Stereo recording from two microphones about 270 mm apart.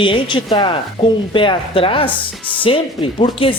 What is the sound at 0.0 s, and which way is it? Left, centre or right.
Speech, centre.